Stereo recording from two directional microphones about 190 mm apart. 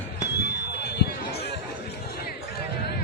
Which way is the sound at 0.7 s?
60° left (ahead or behind).